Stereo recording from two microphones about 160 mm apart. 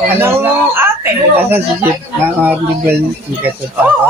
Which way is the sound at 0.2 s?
15° right (ahead or behind).